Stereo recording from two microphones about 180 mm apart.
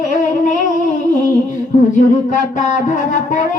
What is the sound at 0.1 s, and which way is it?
Humming, 45° left (ahead or behind).